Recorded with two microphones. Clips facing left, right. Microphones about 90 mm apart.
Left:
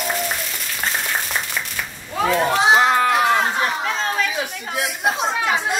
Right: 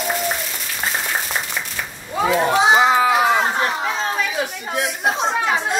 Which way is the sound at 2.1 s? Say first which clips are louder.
Right 1 dB; 5° right (ahead or behind).